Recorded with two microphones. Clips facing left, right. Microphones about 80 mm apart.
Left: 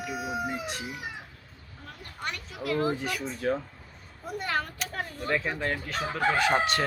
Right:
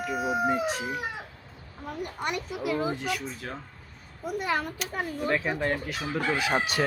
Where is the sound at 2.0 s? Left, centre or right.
Centre.